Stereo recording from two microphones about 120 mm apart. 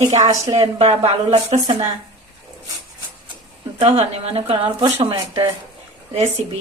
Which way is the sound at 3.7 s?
65° right (ahead or behind).